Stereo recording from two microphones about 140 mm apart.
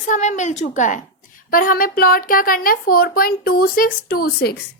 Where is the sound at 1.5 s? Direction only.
90° left.